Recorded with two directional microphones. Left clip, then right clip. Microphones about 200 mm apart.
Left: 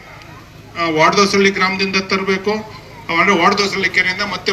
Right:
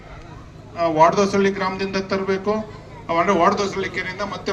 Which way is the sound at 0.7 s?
50° right (ahead or behind).